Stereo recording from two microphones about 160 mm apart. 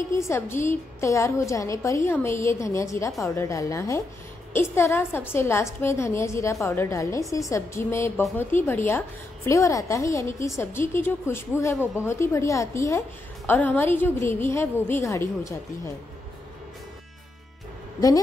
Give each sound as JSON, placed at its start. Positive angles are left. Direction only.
{"t": 0.1, "sound": "a woman's voice", "side_deg": 15}